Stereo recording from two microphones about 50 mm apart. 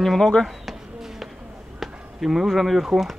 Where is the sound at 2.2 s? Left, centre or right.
Centre.